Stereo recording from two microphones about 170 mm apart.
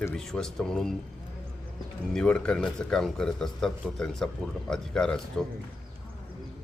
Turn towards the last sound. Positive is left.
turn(degrees=5)  # may be behind; listen again after turning